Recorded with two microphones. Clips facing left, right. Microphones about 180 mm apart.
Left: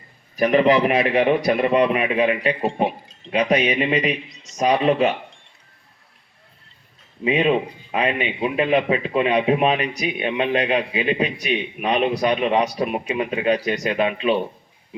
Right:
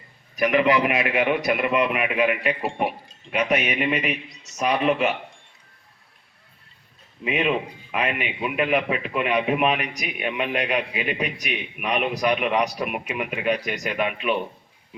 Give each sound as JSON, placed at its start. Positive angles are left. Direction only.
{"t": 0.3, "sound": "speech", "side_deg": 35}
{"t": 7.3, "sound": "speech", "side_deg": 30}